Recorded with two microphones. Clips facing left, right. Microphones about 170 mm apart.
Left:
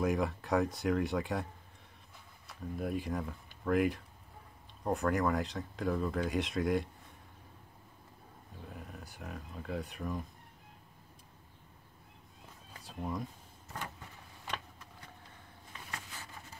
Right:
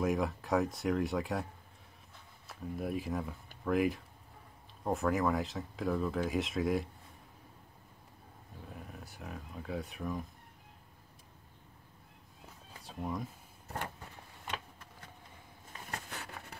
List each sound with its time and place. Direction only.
0.0 s speech: centre (ahead or behind)
8.7 s speech: centre (ahead or behind)
12.8 s speech: centre (ahead or behind)
16.1 s a sound: 70° right (ahead or behind)